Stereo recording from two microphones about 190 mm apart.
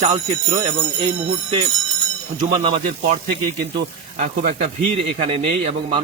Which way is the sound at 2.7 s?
40° right (ahead or behind).